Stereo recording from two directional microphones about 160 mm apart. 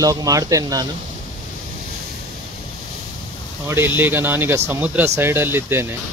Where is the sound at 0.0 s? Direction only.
20° right (ahead or behind).